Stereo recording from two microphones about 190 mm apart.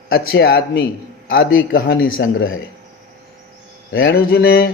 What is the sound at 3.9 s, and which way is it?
Speech, 90° left.